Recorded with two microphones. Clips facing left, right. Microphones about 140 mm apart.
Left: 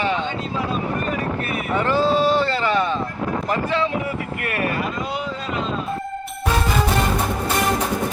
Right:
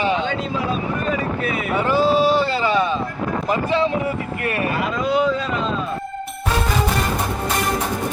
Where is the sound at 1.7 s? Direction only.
10° right (ahead or behind).